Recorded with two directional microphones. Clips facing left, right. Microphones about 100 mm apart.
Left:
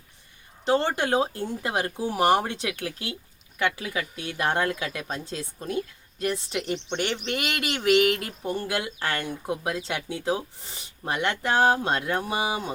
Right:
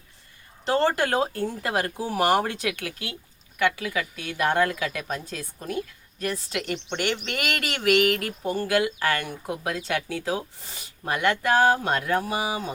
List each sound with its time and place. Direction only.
0.6 s a woman's voice: 20° left (ahead or behind)